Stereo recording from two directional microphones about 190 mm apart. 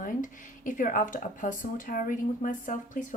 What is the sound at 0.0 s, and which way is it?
Speech, 45° left (ahead or behind).